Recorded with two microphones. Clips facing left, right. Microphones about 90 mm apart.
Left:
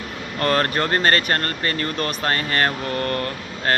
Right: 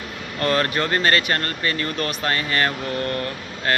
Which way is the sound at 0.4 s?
35° left (ahead or behind).